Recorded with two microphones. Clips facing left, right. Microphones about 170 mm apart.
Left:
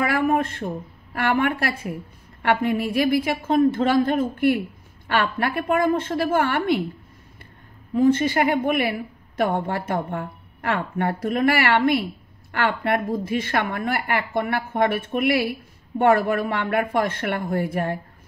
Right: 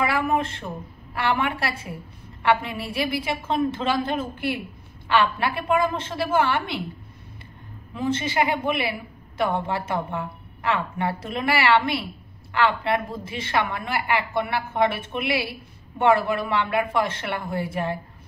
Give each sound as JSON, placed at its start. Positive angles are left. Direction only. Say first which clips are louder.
{"t": 0.0, "sound": "a man's voice", "louder": "left 2 dB", "side_deg": 50}
{"t": 7.9, "sound": "a woman's voice", "louder": "left 7 dB", "side_deg": 50}